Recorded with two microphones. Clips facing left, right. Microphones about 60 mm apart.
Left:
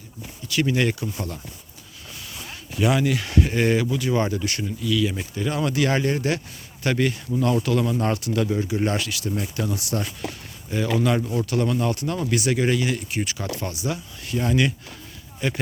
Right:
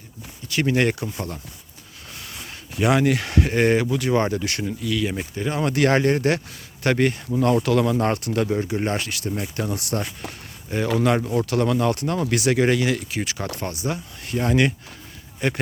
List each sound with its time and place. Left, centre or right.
0.4 s speech: right
1.0 s speech: right
2.1 s speech: right
4.4 s speech: right
4.8 s speech: right
5.4 s speech: right
5.7 s speech: right
9.6 s speech: right
11.3 s speech: right
13.3 s speech: right